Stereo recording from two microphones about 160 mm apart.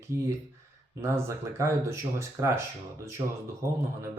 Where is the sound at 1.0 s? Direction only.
15° right (ahead or behind).